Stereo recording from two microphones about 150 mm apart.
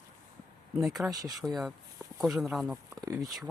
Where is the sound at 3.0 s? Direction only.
25° right (ahead or behind).